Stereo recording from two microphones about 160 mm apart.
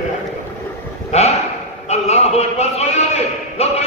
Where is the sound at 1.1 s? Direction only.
40° left (ahead or behind).